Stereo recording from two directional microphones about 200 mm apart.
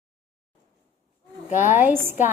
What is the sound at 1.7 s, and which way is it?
Speech, 10° right (ahead or behind).